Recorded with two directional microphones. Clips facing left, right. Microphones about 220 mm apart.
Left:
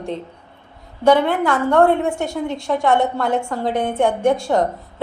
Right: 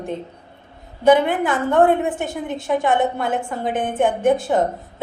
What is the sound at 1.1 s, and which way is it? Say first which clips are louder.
A woman's voice: even; 20° right (ahead or behind).